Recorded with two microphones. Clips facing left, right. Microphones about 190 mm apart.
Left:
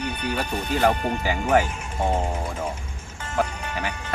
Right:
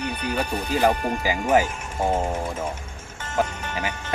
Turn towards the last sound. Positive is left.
turn(degrees=-5)  # may be behind; listen again after turning